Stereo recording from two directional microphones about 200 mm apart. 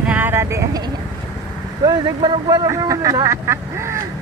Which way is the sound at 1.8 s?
20° right (ahead or behind).